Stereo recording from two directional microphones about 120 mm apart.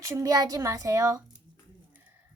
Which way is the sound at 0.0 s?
25° right (ahead or behind).